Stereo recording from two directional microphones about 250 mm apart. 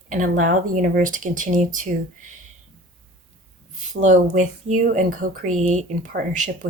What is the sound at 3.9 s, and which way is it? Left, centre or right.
Speech, right.